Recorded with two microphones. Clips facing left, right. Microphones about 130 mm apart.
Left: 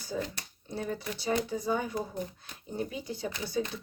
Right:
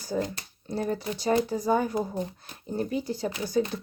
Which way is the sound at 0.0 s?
40° right (ahead or behind).